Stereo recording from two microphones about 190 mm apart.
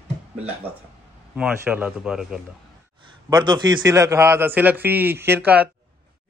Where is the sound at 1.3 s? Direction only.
5° right (ahead or behind).